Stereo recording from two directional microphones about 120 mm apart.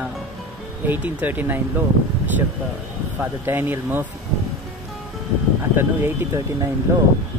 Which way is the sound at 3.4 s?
20° right (ahead or behind).